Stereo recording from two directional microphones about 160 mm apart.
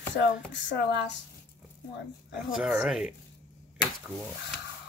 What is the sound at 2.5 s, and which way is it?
Speech, 5° right (ahead or behind).